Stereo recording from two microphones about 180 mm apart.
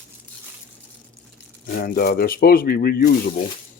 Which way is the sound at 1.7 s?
55° left (ahead or behind).